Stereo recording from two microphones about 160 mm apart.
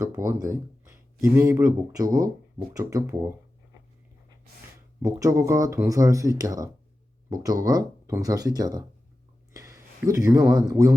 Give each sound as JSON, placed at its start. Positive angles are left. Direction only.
{"t": 0.1, "sound": "speech", "side_deg": -20}
{"t": 5.0, "sound": "speech", "side_deg": -20}
{"t": 9.5, "sound": "a sound", "side_deg": -20}
{"t": 10.2, "sound": "speech", "side_deg": -20}